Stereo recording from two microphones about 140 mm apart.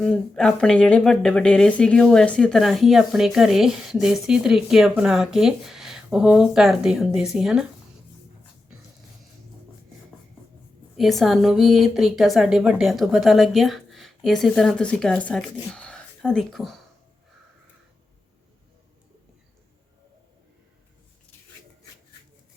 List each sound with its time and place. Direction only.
0.0 s speech: 5° left (ahead or behind)
10.9 s speech: centre (ahead or behind)